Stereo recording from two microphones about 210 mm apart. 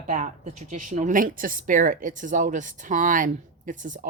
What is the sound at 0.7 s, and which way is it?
Speech, 40° right (ahead or behind).